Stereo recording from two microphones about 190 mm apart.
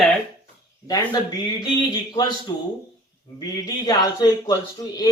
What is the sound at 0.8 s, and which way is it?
A man's voice, 20° left (ahead or behind).